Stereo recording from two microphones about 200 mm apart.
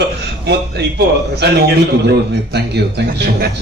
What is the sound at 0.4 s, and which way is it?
A man's voice, 55° right (ahead or behind).